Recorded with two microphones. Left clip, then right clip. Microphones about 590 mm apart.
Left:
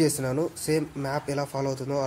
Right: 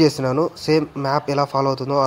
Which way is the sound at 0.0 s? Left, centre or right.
Left.